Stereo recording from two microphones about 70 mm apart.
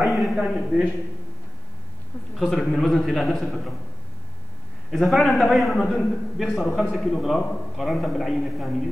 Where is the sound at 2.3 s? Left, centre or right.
Centre.